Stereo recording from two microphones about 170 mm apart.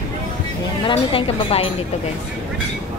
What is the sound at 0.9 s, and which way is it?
Speech, 35° left (ahead or behind).